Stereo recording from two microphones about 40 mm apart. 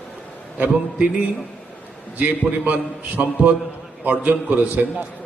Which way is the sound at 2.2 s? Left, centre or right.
Right.